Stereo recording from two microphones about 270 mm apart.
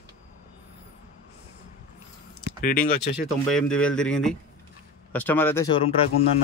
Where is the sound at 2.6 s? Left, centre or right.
Left.